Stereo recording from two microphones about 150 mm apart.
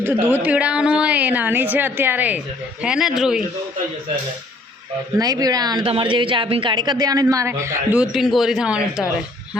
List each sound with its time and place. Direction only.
0.0 s a woman's voice: 15° right (ahead or behind)
5.1 s a woman's voice: 25° right (ahead or behind)
7.9 s speech: 5° right (ahead or behind)